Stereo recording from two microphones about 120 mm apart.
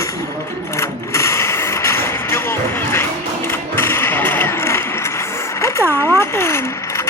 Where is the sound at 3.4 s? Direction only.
20° left (ahead or behind).